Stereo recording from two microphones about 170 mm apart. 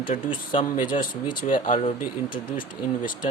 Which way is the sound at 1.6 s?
40° left (ahead or behind).